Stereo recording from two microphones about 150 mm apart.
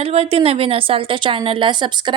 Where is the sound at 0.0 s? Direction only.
40° right (ahead or behind).